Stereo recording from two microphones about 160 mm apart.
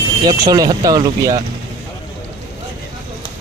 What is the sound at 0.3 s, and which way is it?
Speech, 25° right (ahead or behind).